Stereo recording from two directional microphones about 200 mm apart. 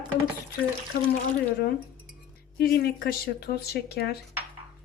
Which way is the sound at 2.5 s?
50° left (ahead or behind).